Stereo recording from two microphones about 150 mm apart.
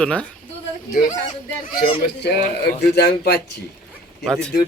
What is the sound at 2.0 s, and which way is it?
Speech, 90° left.